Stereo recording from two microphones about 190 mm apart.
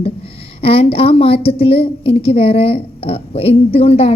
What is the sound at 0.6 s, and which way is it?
A woman's voice, 30° left (ahead or behind).